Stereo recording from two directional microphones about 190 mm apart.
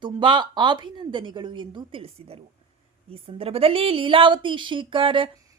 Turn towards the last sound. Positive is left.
turn(degrees=-25)  # may be behind; listen again after turning